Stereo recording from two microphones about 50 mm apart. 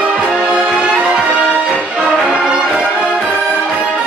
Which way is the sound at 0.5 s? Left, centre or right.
Right.